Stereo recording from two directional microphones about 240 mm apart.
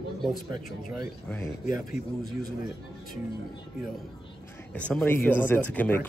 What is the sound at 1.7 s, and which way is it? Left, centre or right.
Speech, left.